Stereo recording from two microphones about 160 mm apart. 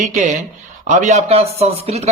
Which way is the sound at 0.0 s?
50° right (ahead or behind).